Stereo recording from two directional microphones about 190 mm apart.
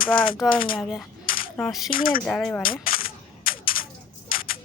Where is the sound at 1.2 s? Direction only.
50° left (ahead or behind).